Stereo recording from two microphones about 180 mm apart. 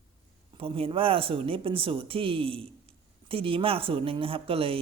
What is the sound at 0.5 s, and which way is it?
Speech, 30° right (ahead or behind).